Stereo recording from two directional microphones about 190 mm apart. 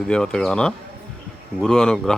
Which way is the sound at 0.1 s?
5° left (ahead or behind).